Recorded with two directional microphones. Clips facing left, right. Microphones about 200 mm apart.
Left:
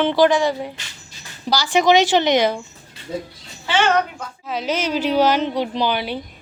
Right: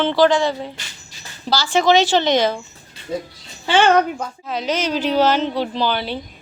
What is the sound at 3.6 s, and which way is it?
Speech, 35° right (ahead or behind).